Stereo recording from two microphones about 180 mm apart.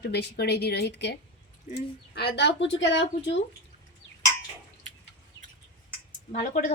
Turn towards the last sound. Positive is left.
turn(degrees=50)  # may be behind; listen again after turning